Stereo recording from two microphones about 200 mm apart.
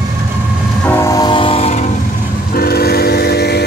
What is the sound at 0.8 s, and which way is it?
Music, 15° left (ahead or behind).